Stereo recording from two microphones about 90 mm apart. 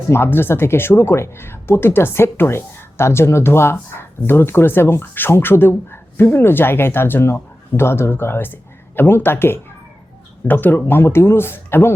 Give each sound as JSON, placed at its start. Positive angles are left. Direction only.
{"t": 0.1, "sound": "speech", "side_deg": 25}